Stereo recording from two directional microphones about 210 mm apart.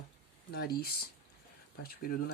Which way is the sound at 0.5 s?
50° left (ahead or behind).